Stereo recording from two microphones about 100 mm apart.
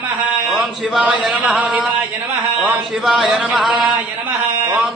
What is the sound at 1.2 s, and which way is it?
Speech, 5° right (ahead or behind).